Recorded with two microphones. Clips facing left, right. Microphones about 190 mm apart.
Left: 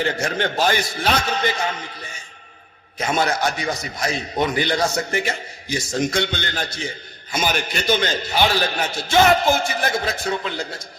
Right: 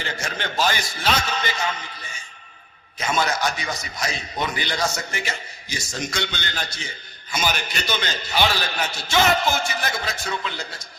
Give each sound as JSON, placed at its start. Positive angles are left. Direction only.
{"t": 0.0, "sound": "a man's voice", "side_deg": 55}